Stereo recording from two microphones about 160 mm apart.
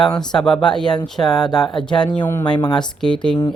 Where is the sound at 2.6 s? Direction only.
25° left (ahead or behind).